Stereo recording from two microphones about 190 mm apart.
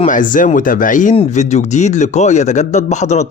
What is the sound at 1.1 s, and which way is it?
Speech, 35° left (ahead or behind).